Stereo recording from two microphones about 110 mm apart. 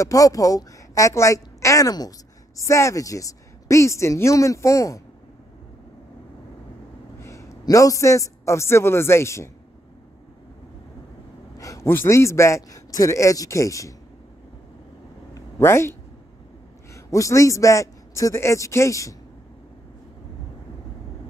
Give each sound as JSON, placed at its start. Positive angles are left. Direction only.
{"t": 0.0, "sound": "a woman's voice", "side_deg": 30}
{"t": 7.2, "sound": "a man's voice", "side_deg": 25}
{"t": 11.5, "sound": "a man's voice", "side_deg": 30}
{"t": 15.3, "sound": "a sound", "side_deg": 25}
{"t": 16.9, "sound": "a man's voice", "side_deg": 30}